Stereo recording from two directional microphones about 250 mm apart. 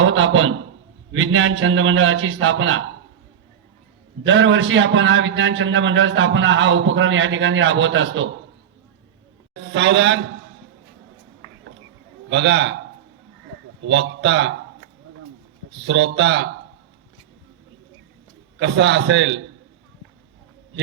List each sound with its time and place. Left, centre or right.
0.0 s a sound: right
1.1 s a man's voice: right
4.2 s a man's voice: right
9.6 s a man's voice: right
12.3 s a man's voice: right
13.8 s a man's voice: right
15.7 s a man's voice: right
18.6 s a man's voice: right